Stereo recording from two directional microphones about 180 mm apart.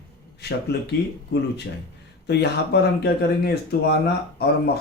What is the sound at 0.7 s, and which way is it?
Speech, 65° left (ahead or behind).